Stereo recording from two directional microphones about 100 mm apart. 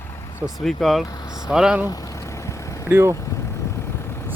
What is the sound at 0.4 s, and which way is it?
Speech, 5° left (ahead or behind).